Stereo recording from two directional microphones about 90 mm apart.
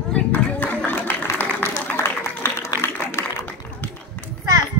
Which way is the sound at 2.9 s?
20° left (ahead or behind).